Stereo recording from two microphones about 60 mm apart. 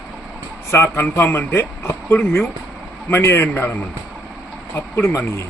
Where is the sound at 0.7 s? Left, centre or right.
Left.